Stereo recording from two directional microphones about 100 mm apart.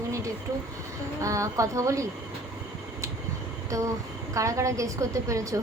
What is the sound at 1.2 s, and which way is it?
Speech, 30° right (ahead or behind).